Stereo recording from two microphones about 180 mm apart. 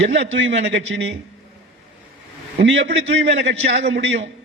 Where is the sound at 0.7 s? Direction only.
90° right.